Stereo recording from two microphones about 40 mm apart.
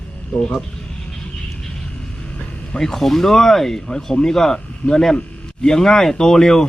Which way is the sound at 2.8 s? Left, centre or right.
Centre.